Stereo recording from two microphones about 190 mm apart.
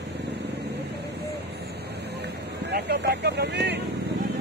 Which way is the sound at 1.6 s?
60° right (ahead or behind).